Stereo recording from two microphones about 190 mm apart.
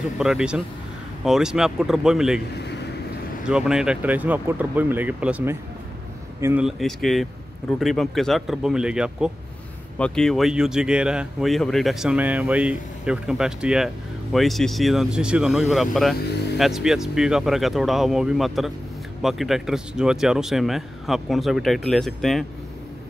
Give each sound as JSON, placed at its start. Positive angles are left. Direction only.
{"t": 0.2, "sound": "speech", "side_deg": -5}
{"t": 2.6, "sound": "a sound", "side_deg": 60}
{"t": 3.4, "sound": "speech", "side_deg": -5}